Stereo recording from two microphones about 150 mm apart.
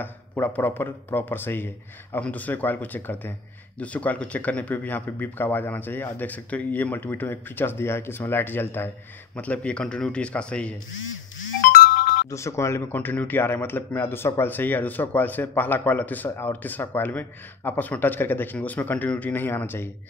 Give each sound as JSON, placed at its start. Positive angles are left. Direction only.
{"t": 0.0, "sound": "speech", "side_deg": 10}
{"t": 11.6, "sound": "ringtone", "side_deg": 75}
{"t": 12.3, "sound": "speech", "side_deg": 20}